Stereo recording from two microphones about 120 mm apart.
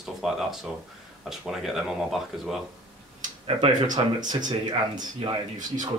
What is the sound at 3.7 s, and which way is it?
Speech, 90° right.